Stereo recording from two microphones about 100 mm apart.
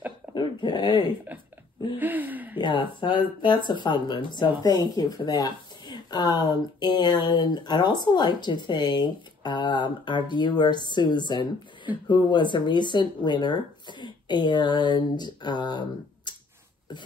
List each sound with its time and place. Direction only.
0.3 s speech: 50° left (ahead or behind)
2.0 s a sound: 20° right (ahead or behind)
2.6 s speech: 55° left (ahead or behind)
16.3 s finger snapping: 45° left (ahead or behind)